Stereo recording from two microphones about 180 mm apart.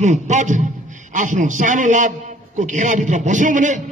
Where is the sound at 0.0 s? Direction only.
40° right (ahead or behind).